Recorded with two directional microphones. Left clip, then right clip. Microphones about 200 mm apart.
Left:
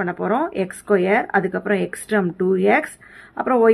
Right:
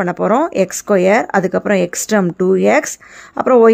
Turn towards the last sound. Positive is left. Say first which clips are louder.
# right 8 dB
turn(degrees=-50)  # may be behind; listen again after turning